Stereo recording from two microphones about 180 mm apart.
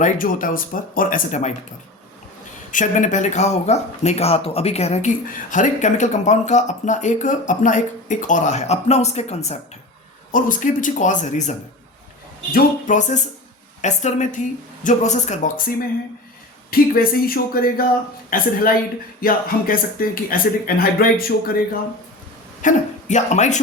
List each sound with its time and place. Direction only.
0.0 s speech: 50° left (ahead or behind)
2.7 s speech: 45° left (ahead or behind)
10.3 s speech: 45° left (ahead or behind)
12.5 s speech: 45° left (ahead or behind)
16.7 s speech: 55° left (ahead or behind)
22.6 s speech: 40° left (ahead or behind)